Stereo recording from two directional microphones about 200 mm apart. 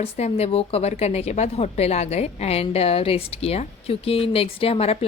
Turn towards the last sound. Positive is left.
turn(degrees=30)  # may be behind; listen again after turning